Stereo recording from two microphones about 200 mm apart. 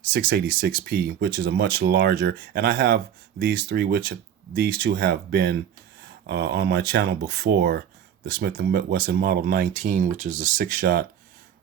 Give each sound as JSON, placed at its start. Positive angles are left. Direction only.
{"t": 0.1, "sound": "speech", "side_deg": -50}